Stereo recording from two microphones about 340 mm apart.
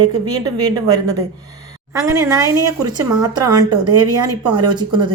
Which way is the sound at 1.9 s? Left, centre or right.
Centre.